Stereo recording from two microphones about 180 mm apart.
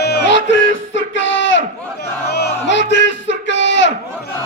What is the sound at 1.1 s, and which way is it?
Battle cry, 90° left.